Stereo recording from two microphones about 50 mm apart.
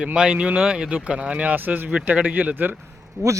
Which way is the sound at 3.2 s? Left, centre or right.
Right.